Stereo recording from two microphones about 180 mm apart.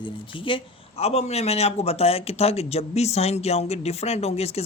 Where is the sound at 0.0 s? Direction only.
30° left (ahead or behind).